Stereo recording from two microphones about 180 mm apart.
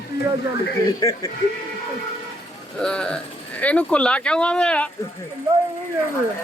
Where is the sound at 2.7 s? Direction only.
5° left (ahead or behind).